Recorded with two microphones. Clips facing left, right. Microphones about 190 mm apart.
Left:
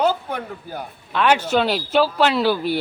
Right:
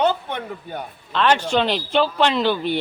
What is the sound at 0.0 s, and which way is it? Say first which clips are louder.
Speech: even; 5° left (ahead or behind).